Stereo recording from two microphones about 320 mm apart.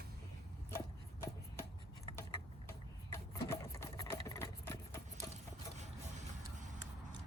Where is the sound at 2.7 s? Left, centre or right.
Centre.